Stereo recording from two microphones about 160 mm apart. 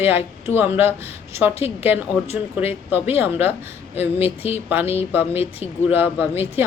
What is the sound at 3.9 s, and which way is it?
Speech, 40° left (ahead or behind).